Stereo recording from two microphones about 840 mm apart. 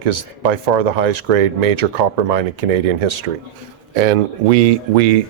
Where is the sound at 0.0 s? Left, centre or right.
Right.